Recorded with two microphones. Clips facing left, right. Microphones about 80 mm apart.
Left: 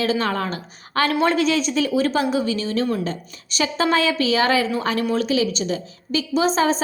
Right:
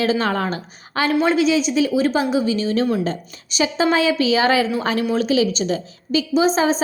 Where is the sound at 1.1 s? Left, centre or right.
Centre.